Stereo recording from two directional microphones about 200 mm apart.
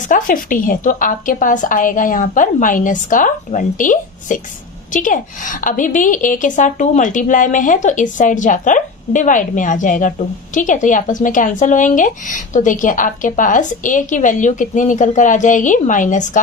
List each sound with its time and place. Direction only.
0.1 s a woman's voice: 45° left (ahead or behind)